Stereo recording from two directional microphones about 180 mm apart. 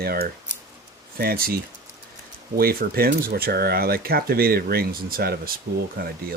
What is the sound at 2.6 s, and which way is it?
Speech, 55° right (ahead or behind).